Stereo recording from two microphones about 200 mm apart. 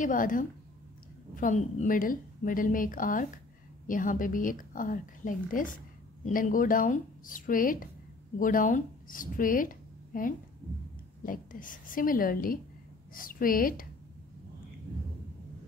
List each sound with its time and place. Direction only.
0.0 s a woman's voice: 40° left (ahead or behind)